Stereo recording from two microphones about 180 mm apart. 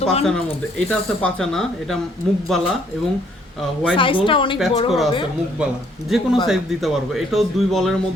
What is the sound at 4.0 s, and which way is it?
Speech, 30° left (ahead or behind).